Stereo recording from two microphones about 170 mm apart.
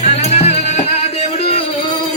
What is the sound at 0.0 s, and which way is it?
Music, 40° left (ahead or behind).